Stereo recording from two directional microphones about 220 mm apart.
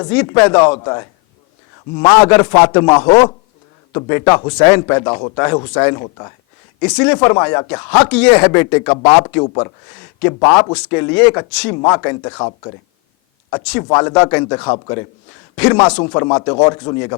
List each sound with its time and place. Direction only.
0.0 s a man's voice: 10° left (ahead or behind)
13.8 s a man's voice: 15° left (ahead or behind)
15.9 s a man's voice: 20° left (ahead or behind)